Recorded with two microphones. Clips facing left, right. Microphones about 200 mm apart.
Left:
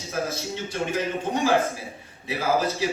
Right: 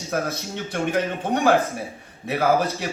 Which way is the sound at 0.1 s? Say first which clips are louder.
Right 2 dB; 60° right (ahead or behind).